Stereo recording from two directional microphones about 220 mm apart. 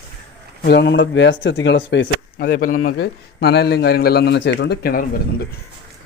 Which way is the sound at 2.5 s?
40° left (ahead or behind).